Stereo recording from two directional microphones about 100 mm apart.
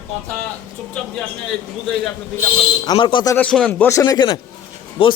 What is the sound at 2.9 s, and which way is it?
Speech, 55° left (ahead or behind).